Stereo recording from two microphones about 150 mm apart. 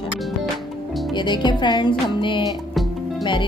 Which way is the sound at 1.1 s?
30° left (ahead or behind).